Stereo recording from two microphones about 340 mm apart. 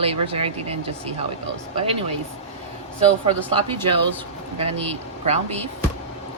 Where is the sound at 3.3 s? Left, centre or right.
Centre.